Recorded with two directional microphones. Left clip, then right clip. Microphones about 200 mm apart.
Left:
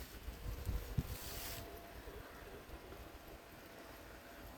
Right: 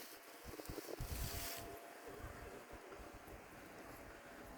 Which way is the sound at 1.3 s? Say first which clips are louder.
Even; 20° left (ahead or behind).